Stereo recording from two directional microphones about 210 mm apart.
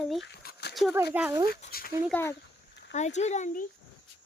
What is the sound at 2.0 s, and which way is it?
Speech, 10° left (ahead or behind).